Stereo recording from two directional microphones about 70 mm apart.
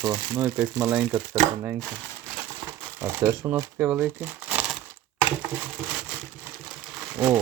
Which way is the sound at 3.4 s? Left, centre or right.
Right.